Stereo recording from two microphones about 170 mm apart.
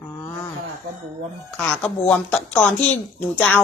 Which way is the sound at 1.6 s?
5° left (ahead or behind).